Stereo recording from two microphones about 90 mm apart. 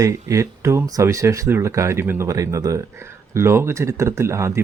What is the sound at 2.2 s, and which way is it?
Speech, 40° right (ahead or behind).